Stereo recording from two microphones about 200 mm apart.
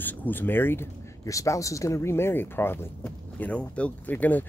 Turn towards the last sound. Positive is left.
turn(degrees=10)  # may be behind; listen again after turning